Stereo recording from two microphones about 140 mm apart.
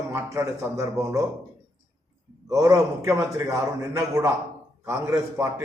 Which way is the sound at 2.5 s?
25° right (ahead or behind).